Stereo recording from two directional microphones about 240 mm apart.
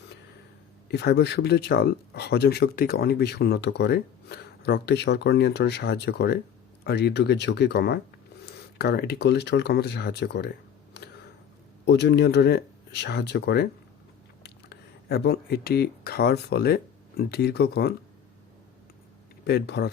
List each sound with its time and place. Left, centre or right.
0.9 s speech: left
11.9 s speech: left
19.5 s speech: left